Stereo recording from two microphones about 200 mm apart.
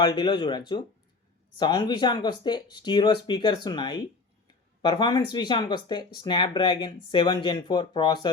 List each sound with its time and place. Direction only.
0.0 s speech: 20° left (ahead or behind)